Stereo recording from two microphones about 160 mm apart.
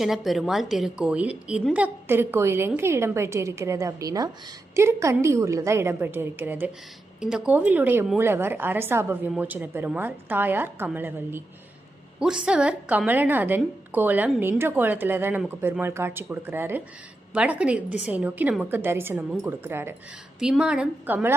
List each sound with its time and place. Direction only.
0.0 s a woman's voice: centre (ahead or behind)